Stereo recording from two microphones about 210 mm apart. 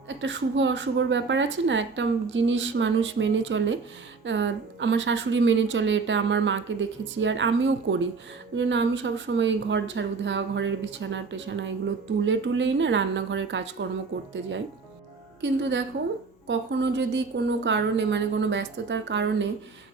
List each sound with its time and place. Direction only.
0.1 s speech: 60° right (ahead or behind)
15.4 s speech: 55° right (ahead or behind)